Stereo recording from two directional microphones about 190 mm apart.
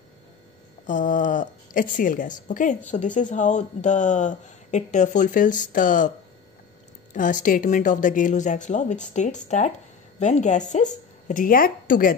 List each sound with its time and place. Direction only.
0.8 s a woman's voice: 45° left (ahead or behind)
7.2 s speech: 45° left (ahead or behind)